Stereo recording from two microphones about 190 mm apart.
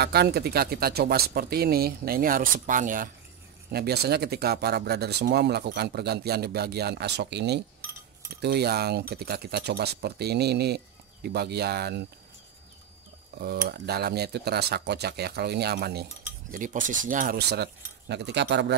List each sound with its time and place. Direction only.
0.0 s speech: 55° right (ahead or behind)
3.7 s speech: 55° right (ahead or behind)
13.4 s speech: 55° right (ahead or behind)
16.5 s speech: 45° right (ahead or behind); by 18.8 s 65° right (ahead or behind)